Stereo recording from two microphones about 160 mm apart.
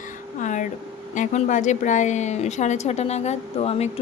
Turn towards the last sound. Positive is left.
turn(degrees=40)  # may be behind; listen again after turning